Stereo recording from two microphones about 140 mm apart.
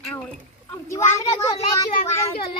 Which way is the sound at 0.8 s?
20° left (ahead or behind).